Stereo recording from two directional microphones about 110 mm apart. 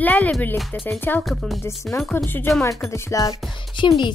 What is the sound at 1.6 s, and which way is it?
Speech, 20° left (ahead or behind).